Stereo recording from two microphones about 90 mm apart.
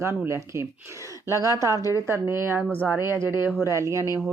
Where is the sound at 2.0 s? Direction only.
30° right (ahead or behind).